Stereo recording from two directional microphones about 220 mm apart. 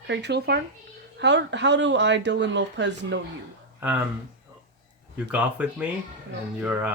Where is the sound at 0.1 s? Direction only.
50° right (ahead or behind).